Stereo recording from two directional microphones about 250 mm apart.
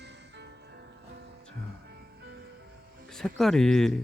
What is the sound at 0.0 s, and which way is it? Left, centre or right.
Music, right.